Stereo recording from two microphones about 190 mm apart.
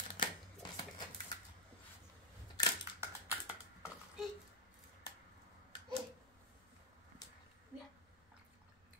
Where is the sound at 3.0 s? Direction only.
10° right (ahead or behind).